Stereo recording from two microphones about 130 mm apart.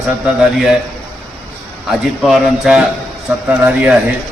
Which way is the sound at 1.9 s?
5° right (ahead or behind).